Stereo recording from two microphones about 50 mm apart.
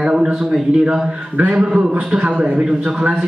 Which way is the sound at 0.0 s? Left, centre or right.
Centre.